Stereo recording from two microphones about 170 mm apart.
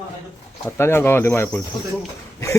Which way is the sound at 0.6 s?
15° left (ahead or behind).